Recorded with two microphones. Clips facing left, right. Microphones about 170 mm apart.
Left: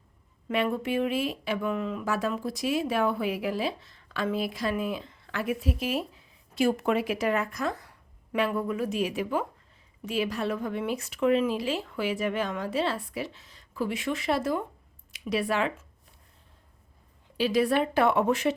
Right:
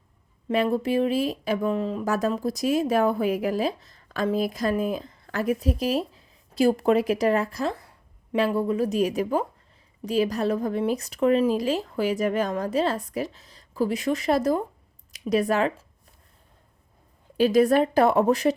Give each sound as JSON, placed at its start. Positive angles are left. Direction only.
{"t": 0.4, "sound": "speech", "side_deg": -35}
{"t": 17.3, "sound": "speech", "side_deg": -45}